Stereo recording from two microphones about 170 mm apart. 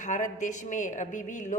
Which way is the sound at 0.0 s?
45° left (ahead or behind).